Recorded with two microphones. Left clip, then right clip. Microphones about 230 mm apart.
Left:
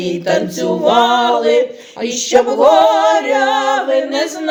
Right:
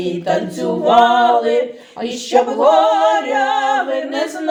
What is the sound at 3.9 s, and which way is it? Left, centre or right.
Music, left.